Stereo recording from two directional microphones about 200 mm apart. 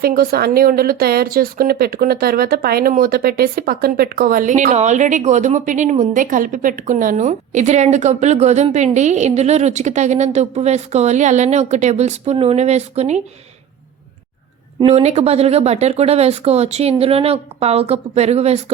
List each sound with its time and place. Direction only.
0.0 s speech: 50° right (ahead or behind)
14.8 s speech: 30° right (ahead or behind)